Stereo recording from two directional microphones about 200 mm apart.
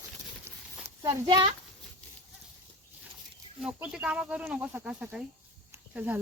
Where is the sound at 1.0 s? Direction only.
20° right (ahead or behind).